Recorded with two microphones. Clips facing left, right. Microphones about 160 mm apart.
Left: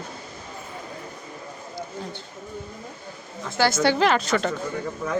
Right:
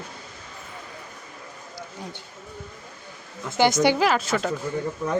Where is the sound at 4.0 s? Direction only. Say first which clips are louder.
Left 1 dB; 5° right (ahead or behind).